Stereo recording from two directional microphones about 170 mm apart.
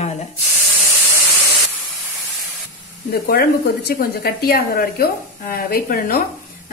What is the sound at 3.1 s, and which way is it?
A woman's voice, 65° left (ahead or behind).